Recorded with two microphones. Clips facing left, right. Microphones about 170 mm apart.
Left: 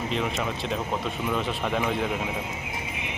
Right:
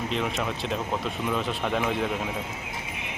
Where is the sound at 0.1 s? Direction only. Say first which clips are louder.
Even; centre (ahead or behind).